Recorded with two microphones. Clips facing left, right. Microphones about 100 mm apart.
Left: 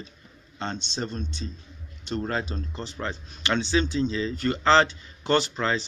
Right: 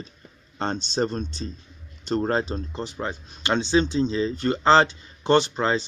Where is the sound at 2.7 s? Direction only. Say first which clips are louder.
Even; 15° right (ahead or behind).